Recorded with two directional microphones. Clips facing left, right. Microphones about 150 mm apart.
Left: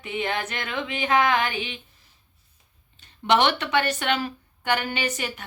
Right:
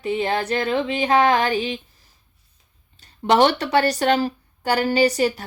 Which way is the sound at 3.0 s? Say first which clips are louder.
Right 4 dB; 40° right (ahead or behind).